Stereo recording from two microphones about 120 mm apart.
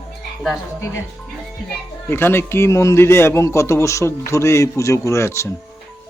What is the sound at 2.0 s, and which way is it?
Speech, 20° left (ahead or behind).